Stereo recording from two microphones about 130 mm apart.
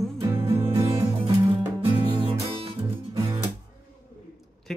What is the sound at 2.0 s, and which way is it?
Music, 45° right (ahead or behind).